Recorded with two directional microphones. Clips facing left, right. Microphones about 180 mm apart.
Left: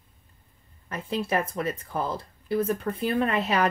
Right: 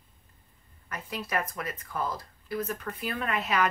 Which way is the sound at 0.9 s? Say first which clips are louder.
Left 6 dB; 30° left (ahead or behind).